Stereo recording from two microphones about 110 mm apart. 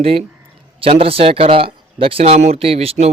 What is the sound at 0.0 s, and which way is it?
Speech, 60° right (ahead or behind).